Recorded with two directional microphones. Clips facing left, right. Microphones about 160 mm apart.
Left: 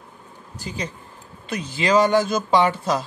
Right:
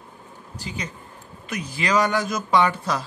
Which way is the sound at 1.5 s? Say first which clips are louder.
Left 4 dB; 25° left (ahead or behind).